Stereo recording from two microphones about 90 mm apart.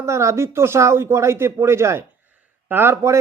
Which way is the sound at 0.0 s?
35° right (ahead or behind).